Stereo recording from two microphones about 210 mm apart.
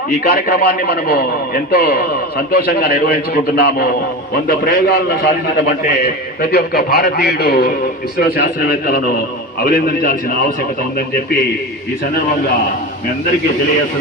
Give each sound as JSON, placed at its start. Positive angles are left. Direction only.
{"t": 0.1, "sound": "a man's voice", "side_deg": 45}